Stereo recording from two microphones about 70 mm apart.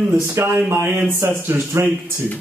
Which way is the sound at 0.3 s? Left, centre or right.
Right.